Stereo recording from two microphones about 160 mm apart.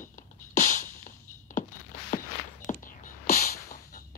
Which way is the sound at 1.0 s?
55° left (ahead or behind).